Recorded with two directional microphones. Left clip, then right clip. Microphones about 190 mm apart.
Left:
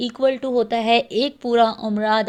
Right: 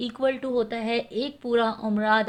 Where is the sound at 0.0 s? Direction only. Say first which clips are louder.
Left 6 dB; 30° left (ahead or behind).